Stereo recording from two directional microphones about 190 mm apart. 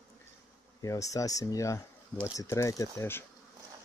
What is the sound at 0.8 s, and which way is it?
Speech, 15° left (ahead or behind).